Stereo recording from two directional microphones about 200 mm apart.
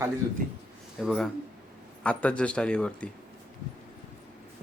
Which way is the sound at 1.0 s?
Centre (ahead or behind).